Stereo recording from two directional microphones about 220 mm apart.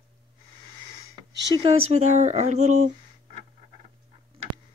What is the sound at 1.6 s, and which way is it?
Speech, 30° right (ahead or behind).